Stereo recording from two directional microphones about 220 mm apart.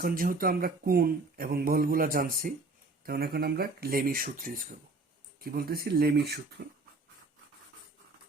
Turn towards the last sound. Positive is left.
turn(degrees=-45)  # may be behind; listen again after turning